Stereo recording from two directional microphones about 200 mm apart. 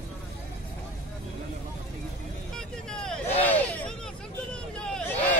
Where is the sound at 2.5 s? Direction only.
5° left (ahead or behind).